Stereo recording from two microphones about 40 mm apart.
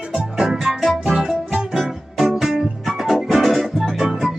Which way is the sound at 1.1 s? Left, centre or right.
Centre.